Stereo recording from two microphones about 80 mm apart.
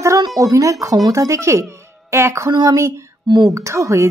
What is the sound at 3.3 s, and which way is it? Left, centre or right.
Speech, right.